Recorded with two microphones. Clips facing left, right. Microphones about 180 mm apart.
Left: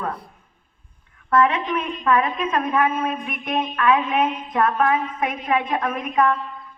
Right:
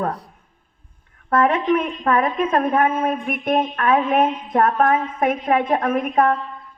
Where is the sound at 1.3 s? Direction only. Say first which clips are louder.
Right 2 dB; 50° right (ahead or behind).